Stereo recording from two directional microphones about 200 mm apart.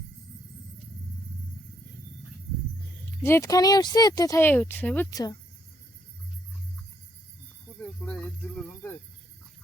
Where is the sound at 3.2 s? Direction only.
15° left (ahead or behind).